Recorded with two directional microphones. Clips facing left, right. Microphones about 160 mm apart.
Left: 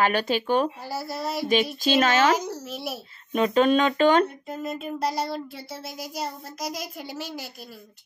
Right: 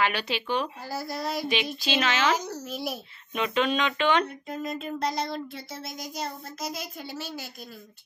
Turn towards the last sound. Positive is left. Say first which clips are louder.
# left 2 dB
turn(degrees=10)  # may be behind; listen again after turning